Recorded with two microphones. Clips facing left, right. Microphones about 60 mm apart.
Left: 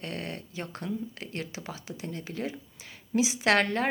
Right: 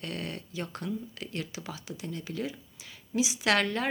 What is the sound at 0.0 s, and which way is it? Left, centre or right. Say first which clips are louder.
Speech: left 1 dB; left.